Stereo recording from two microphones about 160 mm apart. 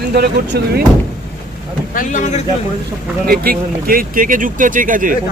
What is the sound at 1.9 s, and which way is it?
Speech, 50° left (ahead or behind).